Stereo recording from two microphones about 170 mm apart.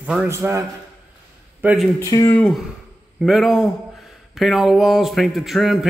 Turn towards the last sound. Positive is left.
turn(degrees=0)  # may be behind; listen again after turning